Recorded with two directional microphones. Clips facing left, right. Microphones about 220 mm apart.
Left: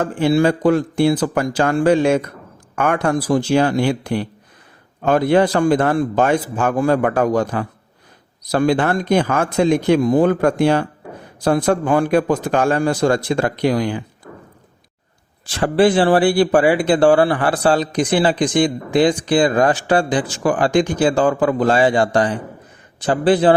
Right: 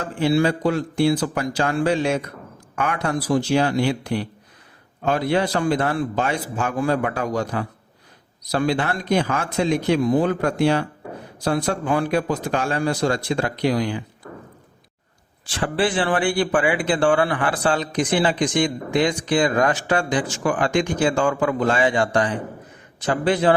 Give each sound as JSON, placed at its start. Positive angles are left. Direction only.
{"t": 0.0, "sound": "a man's voice", "side_deg": 50}
{"t": 15.4, "sound": "speech", "side_deg": 40}